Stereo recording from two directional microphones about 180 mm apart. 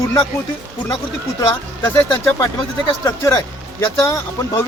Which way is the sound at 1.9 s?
15° left (ahead or behind).